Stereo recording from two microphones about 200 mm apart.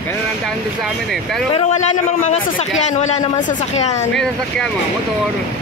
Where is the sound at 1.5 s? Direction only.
35° left (ahead or behind).